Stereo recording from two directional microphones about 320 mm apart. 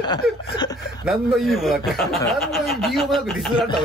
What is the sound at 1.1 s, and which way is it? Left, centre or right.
A man's voice, centre.